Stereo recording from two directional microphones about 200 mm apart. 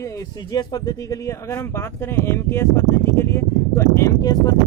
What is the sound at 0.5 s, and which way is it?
Speech, 20° left (ahead or behind).